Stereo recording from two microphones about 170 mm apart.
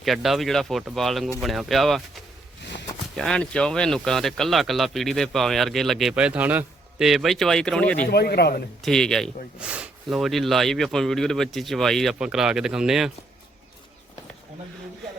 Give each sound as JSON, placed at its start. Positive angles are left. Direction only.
{"t": 0.0, "sound": "speech", "side_deg": 0}
{"t": 8.1, "sound": "a man's voice", "side_deg": 75}
{"t": 8.8, "sound": "speech", "side_deg": 5}